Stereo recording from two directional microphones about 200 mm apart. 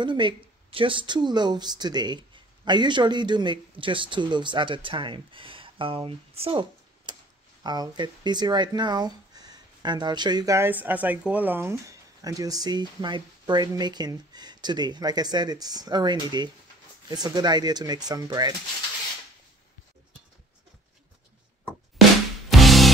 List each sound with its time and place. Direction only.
0.0 s speech: 25° right (ahead or behind)
22.5 s music: centre (ahead or behind)